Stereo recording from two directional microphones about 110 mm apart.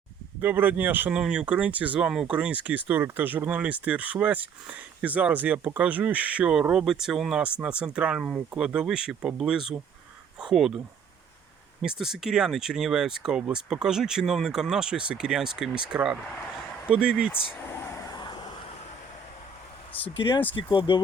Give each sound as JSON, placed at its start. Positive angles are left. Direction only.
{"t": 0.4, "sound": "speech", "side_deg": -15}
{"t": 11.8, "sound": "speech", "side_deg": -5}
{"t": 17.5, "sound": "a sound", "side_deg": 20}
{"t": 18.1, "sound": "vehicle", "side_deg": 45}
{"t": 19.9, "sound": "speech", "side_deg": 55}